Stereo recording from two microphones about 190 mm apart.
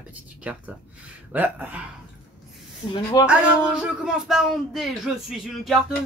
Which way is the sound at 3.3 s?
5° right (ahead or behind).